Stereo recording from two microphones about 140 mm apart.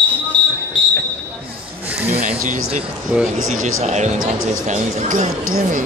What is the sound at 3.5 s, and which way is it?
Speech, 55° right (ahead or behind).